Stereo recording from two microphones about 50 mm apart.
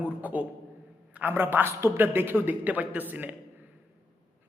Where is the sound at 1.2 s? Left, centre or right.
Right.